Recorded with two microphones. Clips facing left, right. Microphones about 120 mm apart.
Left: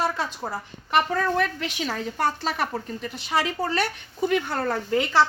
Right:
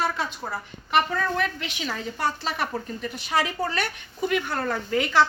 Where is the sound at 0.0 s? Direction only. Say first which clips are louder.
Left 1 dB; 35° left (ahead or behind).